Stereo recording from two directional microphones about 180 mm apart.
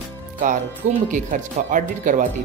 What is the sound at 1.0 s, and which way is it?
Speech, 45° right (ahead or behind).